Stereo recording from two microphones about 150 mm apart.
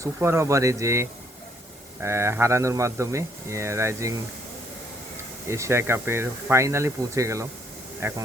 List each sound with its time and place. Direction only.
0.0 s speech: 15° right (ahead or behind)
5.5 s speech: 20° right (ahead or behind)